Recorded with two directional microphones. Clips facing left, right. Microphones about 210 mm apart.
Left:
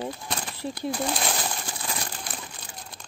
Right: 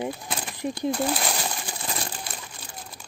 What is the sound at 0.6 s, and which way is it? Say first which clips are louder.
Speech: right 5 dB; 15° right (ahead or behind).